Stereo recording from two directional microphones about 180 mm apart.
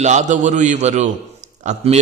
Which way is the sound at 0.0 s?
40° right (ahead or behind).